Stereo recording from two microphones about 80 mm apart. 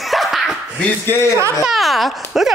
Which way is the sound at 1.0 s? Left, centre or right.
Left.